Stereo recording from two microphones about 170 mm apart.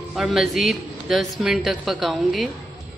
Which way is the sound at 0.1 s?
5° right (ahead or behind).